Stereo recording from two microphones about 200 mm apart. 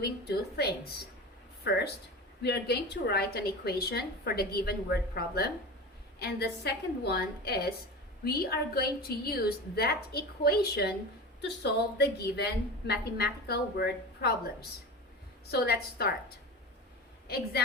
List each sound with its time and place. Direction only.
0.0 s a woman's voice: 50° left (ahead or behind)
15.4 s a woman's voice: 50° left (ahead or behind)